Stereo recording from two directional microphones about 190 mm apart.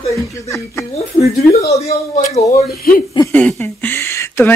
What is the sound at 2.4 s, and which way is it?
Speech, 35° left (ahead or behind).